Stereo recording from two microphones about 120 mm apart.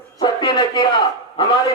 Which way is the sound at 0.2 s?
40° left (ahead or behind).